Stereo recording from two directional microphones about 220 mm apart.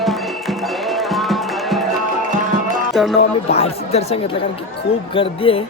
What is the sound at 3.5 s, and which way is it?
Speech, 30° left (ahead or behind).